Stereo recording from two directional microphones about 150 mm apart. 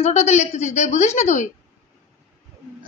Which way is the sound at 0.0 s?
45° left (ahead or behind).